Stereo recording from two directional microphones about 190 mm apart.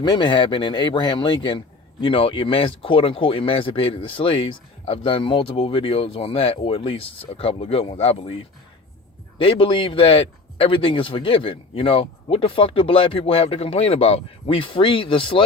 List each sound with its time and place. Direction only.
0.0 s speech: 25° left (ahead or behind)
9.4 s speech: 25° left (ahead or behind)